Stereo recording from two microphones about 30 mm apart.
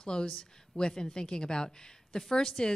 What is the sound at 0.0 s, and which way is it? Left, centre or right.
Speech, left.